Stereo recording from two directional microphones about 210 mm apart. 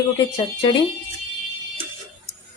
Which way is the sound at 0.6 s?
20° left (ahead or behind).